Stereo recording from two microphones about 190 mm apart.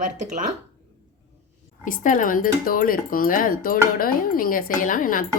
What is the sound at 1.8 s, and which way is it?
Speech, 45° left (ahead or behind).